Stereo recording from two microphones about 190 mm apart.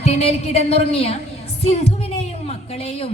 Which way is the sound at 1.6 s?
30° left (ahead or behind).